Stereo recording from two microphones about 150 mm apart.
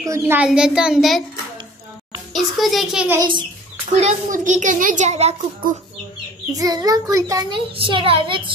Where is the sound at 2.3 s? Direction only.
Centre (ahead or behind).